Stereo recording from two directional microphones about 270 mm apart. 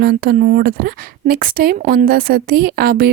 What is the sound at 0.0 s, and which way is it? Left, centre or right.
A woman's voice, right.